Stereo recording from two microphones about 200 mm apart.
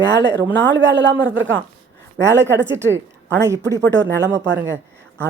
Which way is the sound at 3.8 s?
60° right (ahead or behind).